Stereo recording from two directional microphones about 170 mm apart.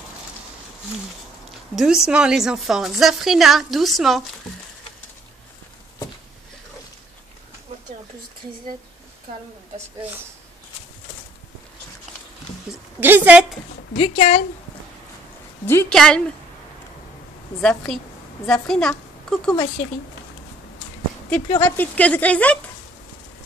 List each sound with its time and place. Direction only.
1.8 s a woman's voice: 5° right (ahead or behind)
12.7 s a sound: 5° right (ahead or behind)
13.0 s a woman's voice: 10° right (ahead or behind)
13.9 s speech: 40° left (ahead or behind)
15.6 s speech: 10° left (ahead or behind)
17.6 s a woman's voice: 5° left (ahead or behind)
21.6 s speech: 10° left (ahead or behind)